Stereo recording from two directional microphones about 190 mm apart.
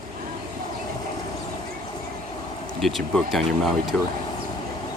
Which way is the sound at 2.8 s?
Centre (ahead or behind).